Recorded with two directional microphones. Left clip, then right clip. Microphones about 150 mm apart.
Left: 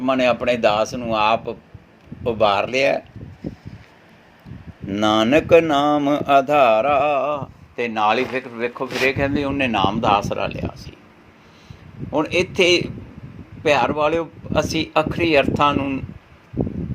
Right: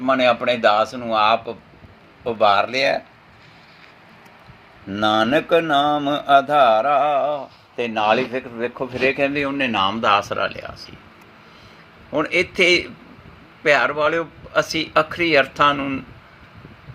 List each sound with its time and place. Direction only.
0.0 s speech: 25° left (ahead or behind)
2.2 s mantra: 30° left (ahead or behind)
4.9 s mantra: 35° left (ahead or behind)
9.0 s speech: 10° left (ahead or behind)
12.1 s speech: 20° left (ahead or behind)